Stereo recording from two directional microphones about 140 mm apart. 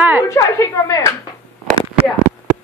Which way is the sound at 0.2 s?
20° left (ahead or behind).